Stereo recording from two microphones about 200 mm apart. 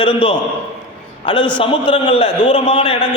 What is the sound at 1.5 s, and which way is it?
A man's voice, 25° left (ahead or behind).